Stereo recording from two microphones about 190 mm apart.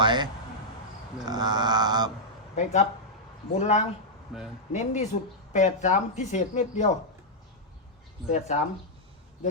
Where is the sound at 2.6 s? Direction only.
35° left (ahead or behind).